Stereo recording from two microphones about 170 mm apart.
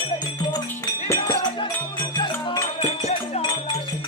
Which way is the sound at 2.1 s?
25° left (ahead or behind).